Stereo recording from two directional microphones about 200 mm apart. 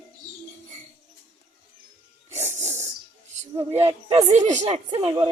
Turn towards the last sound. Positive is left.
turn(degrees=-25)  # may be behind; listen again after turning